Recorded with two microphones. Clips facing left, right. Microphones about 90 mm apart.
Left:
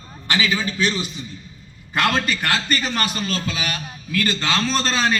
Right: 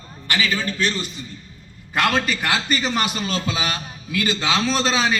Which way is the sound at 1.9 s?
Centre (ahead or behind).